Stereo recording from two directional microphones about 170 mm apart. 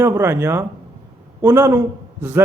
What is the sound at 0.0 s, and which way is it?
A man's voice, 15° right (ahead or behind).